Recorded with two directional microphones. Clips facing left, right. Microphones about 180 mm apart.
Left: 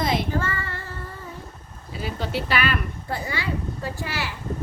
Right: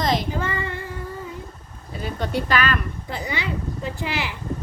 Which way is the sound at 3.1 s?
20° right (ahead or behind).